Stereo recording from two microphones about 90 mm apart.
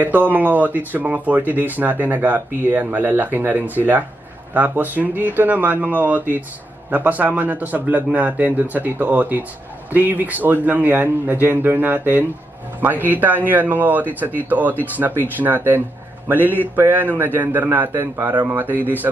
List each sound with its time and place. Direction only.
0.0 s speech: 20° right (ahead or behind)